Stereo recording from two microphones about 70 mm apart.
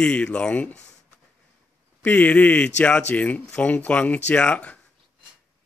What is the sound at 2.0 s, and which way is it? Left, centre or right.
Speech, left.